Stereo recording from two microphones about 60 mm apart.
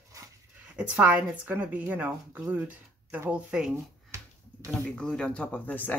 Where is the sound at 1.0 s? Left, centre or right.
Right.